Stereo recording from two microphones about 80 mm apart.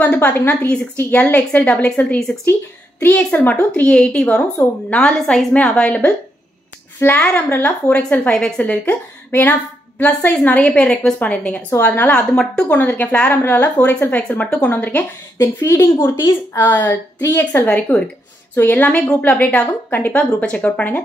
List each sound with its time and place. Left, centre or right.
0.0 s a woman's voice: centre
3.2 s a woman's voice: centre
3.4 s a woman's voice: left
7.2 s a woman's voice: centre
7.4 s a woman's voice: left
10.6 s a woman's voice: centre
12.1 s a woman's voice: centre
12.6 s a woman's voice: left
15.3 s a woman's voice: left
17.2 s speech: left
17.6 s a woman's voice: centre